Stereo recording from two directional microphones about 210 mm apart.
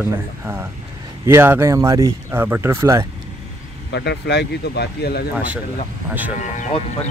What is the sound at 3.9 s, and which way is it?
Speech, 55° left (ahead or behind).